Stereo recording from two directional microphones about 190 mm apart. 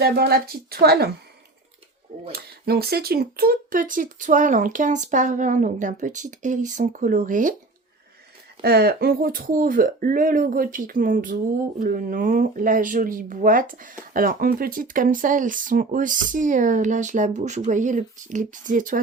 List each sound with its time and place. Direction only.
0.0 s a woman's voice: 55° right (ahead or behind)
2.3 s speech: 55° right (ahead or behind)
8.6 s speech: 55° right (ahead or behind)